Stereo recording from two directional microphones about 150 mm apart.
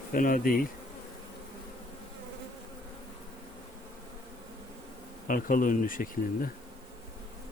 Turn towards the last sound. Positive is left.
turn(degrees=65)  # may be behind; listen again after turning